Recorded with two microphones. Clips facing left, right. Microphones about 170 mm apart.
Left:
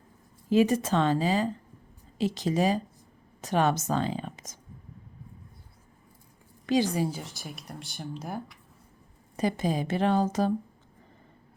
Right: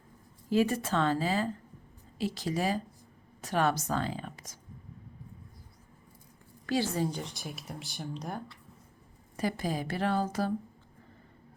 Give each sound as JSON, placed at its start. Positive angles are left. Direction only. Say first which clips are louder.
{"t": 0.5, "sound": "a woman's voice", "louder": "left 4 dB", "side_deg": 20}
{"t": 6.7, "sound": "speech", "louder": "left 4 dB", "side_deg": 15}
{"t": 9.3, "sound": "a woman's voice", "louder": "left 4 dB", "side_deg": 20}